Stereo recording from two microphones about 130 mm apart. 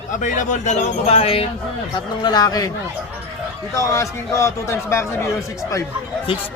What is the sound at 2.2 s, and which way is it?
Speech, 30° left (ahead or behind).